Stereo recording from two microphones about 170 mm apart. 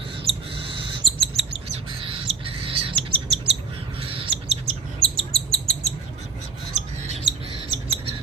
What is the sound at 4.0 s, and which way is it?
Bird, 35° right (ahead or behind).